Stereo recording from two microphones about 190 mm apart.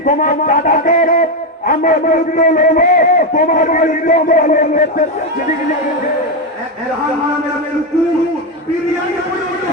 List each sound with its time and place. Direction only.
0.0 s a man's voice: 45° left (ahead or behind)